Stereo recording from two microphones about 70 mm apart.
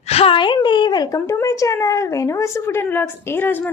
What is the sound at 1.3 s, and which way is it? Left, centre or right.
A woman's voice, left.